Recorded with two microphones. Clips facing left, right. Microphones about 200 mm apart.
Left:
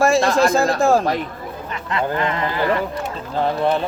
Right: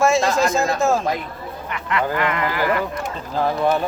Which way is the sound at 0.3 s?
35° left (ahead or behind).